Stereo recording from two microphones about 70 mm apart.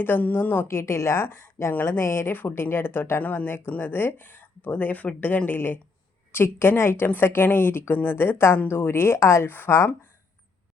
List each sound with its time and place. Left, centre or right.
0.0 s speech: left
0.7 s a woman's voice: left